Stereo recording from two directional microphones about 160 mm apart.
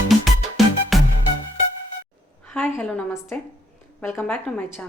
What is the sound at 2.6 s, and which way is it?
A woman's voice, 10° left (ahead or behind).